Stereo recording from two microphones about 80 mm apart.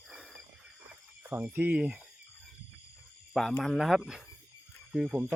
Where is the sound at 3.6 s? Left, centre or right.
Centre.